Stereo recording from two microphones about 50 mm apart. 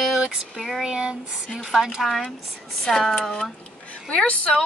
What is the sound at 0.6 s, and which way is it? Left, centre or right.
Speech, centre.